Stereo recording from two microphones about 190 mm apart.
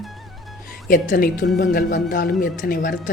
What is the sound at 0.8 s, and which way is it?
Speech, 45° left (ahead or behind).